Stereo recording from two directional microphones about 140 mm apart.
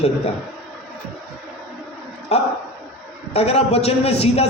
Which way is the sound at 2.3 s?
50° left (ahead or behind).